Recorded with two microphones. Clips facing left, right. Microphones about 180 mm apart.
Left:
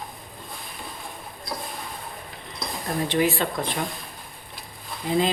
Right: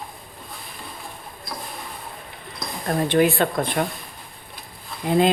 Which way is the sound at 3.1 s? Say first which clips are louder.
Right 5 dB; 55° right (ahead or behind).